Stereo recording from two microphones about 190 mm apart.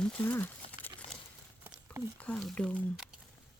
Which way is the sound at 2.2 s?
5° left (ahead or behind).